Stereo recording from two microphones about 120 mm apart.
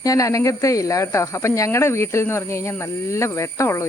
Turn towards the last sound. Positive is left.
turn(degrees=25)  # may be behind; listen again after turning